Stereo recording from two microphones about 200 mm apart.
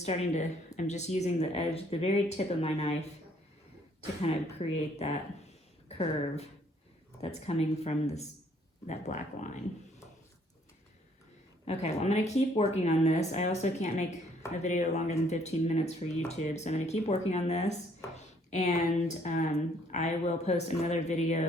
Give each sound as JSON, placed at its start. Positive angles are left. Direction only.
{"t": 0.0, "sound": "speech", "side_deg": 35}
{"t": 4.2, "sound": "speech", "side_deg": 30}
{"t": 11.6, "sound": "speech", "side_deg": 30}